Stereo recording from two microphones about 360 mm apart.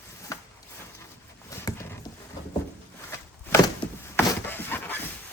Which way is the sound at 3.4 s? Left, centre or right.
Centre.